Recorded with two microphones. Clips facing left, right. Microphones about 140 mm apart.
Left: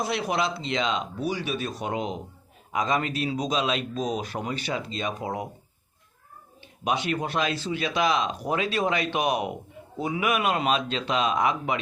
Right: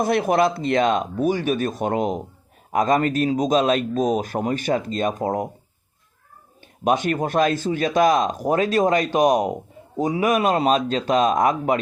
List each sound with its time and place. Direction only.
0.0 s speech: 50° right (ahead or behind)
6.8 s speech: 50° right (ahead or behind)